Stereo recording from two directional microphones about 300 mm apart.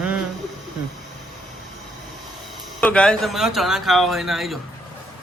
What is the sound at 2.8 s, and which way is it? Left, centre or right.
Speech, centre.